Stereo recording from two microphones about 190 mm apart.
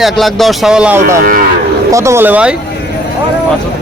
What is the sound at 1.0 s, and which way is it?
Cattle, 45° right (ahead or behind).